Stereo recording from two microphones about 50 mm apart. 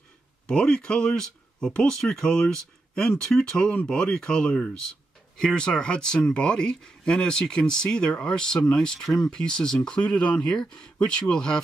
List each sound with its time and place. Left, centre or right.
0.5 s speech: centre